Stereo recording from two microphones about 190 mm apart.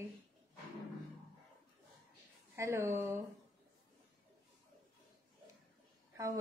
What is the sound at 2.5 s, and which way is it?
Speech, 15° right (ahead or behind).